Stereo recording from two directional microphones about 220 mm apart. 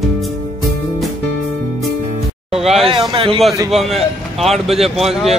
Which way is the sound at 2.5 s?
Centre (ahead or behind).